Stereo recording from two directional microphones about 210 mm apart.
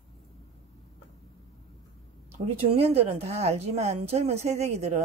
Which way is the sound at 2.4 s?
30° right (ahead or behind).